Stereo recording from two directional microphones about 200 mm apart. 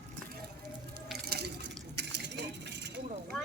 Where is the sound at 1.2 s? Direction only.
55° right (ahead or behind).